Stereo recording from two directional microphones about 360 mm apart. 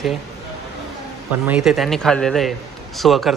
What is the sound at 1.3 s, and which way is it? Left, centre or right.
A man's voice, centre.